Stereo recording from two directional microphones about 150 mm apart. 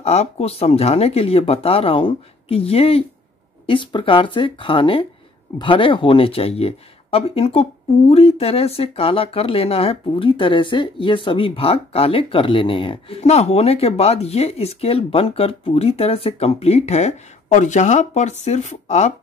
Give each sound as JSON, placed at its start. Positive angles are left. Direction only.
{"t": 0.0, "sound": "speech", "side_deg": 45}